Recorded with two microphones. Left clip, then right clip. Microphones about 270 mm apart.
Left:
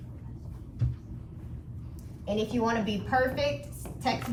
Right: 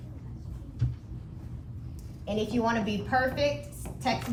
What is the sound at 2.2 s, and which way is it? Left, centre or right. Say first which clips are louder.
A woman's voice: even; centre.